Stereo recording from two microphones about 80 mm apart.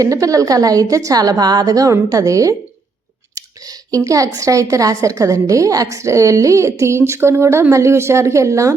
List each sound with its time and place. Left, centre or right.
0.0 s a woman's voice: right